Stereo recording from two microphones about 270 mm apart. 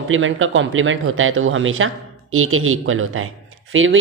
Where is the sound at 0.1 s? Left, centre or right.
Right.